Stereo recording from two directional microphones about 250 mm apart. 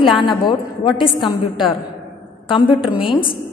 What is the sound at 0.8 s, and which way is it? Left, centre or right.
Speech, centre.